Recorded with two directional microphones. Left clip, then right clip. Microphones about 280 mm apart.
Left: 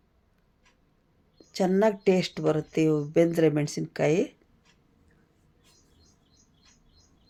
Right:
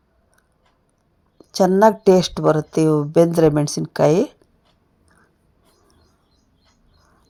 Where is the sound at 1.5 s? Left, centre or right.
Right.